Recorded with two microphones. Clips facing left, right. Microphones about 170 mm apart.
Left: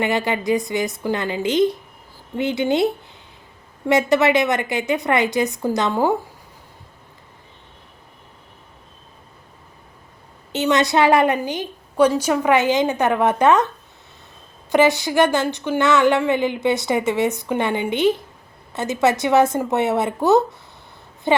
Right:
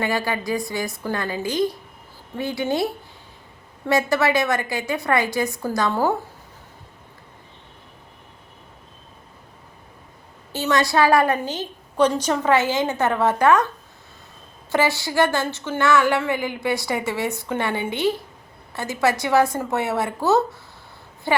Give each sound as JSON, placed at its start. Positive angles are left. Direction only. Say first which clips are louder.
{"t": 0.0, "sound": "speech", "louder": "left 3 dB", "side_deg": 20}
{"t": 10.5, "sound": "a woman's voice", "louder": "left 3 dB", "side_deg": 20}
{"t": 14.7, "sound": "speech", "louder": "left 5 dB", "side_deg": 20}